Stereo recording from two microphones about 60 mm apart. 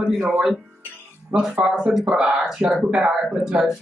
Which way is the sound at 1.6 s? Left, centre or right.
Centre.